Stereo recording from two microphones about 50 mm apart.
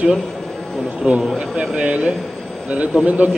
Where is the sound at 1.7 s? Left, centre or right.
Right.